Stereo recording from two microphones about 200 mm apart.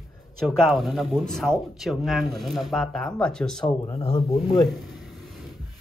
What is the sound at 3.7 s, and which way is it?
Speech, 20° left (ahead or behind).